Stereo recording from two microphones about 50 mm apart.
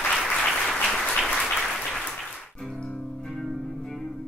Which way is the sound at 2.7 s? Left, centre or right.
Centre.